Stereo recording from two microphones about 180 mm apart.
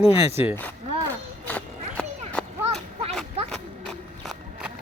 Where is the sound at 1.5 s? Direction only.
5° left (ahead or behind).